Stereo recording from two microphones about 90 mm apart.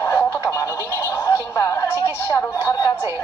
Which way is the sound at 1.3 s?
35° left (ahead or behind).